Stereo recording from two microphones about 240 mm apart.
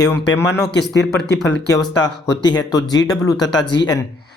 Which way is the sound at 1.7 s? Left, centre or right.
Centre.